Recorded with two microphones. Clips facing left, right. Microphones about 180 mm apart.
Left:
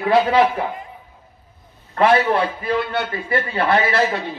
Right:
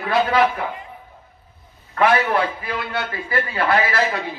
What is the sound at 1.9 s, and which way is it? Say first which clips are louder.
A man's voice: left 2 dB; 30° left (ahead or behind).